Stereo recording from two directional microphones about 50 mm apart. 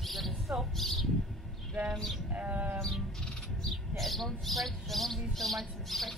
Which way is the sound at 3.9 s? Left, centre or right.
Centre.